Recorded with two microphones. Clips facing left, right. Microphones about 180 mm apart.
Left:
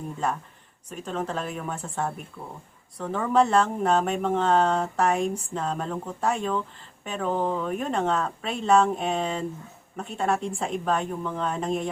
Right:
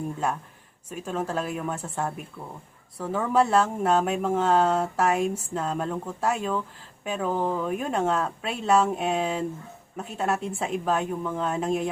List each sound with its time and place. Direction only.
0.9 s speech: 5° right (ahead or behind)